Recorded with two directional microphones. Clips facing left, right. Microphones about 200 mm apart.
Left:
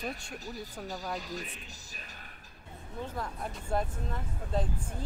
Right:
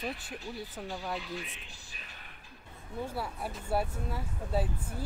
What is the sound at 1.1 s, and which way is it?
Speech, 40° left (ahead or behind).